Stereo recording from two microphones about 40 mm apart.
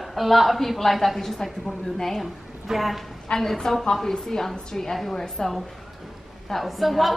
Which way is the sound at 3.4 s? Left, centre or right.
Centre.